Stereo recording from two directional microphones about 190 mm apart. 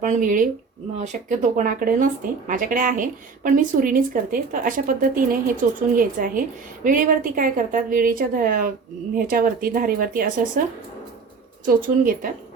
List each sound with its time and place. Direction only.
0.0 s a woman's voice: 40° right (ahead or behind)
11.6 s a woman's voice: 45° right (ahead or behind)